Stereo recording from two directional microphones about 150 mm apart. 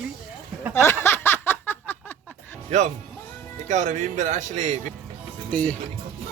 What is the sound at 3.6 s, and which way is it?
Speech, 55° right (ahead or behind).